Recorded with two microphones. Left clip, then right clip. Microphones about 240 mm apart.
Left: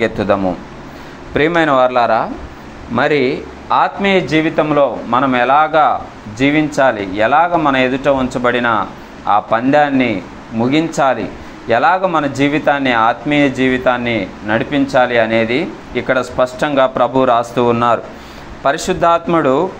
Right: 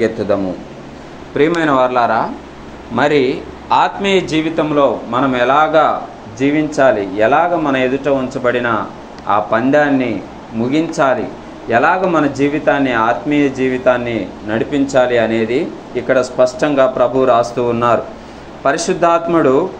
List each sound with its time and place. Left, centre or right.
0.0 s a man's voice: left